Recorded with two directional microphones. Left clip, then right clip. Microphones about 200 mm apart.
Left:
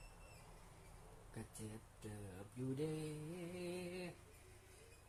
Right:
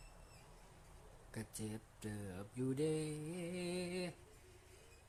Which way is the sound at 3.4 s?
25° right (ahead or behind).